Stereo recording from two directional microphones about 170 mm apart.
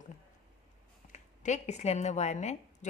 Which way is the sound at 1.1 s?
45° left (ahead or behind).